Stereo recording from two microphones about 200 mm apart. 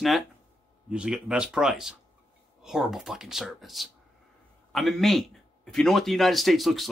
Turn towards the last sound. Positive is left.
turn(degrees=0)  # may be behind; listen again after turning